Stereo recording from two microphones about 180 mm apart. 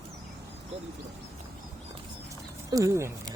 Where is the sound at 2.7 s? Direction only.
15° right (ahead or behind).